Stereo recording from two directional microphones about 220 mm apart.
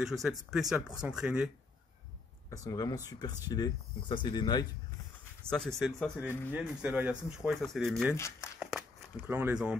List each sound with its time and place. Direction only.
0.0 s speech: centre (ahead or behind)
2.5 s speech: 15° left (ahead or behind)
5.5 s speech: centre (ahead or behind)
6.5 s speech: 5° right (ahead or behind)
8.5 s a sound: centre (ahead or behind)